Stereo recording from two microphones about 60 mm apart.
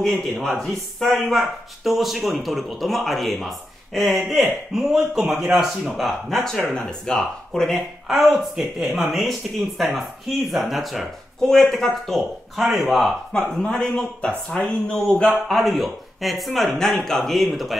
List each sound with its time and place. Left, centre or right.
0.0 s speech: centre
8.1 s speech: centre
13.3 s speech: centre
15.4 s speech: centre